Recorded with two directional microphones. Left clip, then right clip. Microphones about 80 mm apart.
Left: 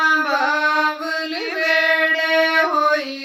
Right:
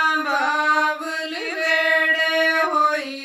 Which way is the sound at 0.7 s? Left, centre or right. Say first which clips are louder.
Left 1 dB; right.